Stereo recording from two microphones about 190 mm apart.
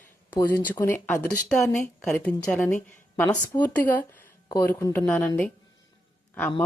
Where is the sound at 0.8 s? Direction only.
10° left (ahead or behind).